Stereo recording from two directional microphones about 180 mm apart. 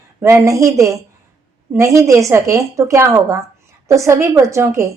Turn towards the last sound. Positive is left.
turn(degrees=-15)  # may be behind; listen again after turning